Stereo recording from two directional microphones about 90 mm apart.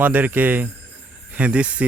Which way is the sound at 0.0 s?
20° right (ahead or behind).